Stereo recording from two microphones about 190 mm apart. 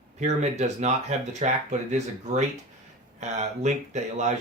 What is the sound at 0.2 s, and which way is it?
Speech, 35° right (ahead or behind).